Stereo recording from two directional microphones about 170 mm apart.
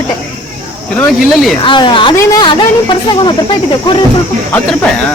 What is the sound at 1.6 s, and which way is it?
Speech, 30° left (ahead or behind).